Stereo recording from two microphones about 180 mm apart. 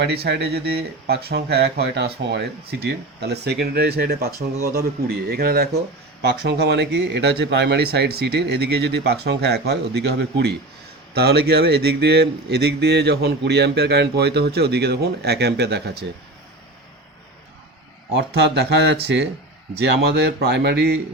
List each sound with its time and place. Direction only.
0.0 s speech: 65° right (ahead or behind)
18.2 s speech: 65° right (ahead or behind)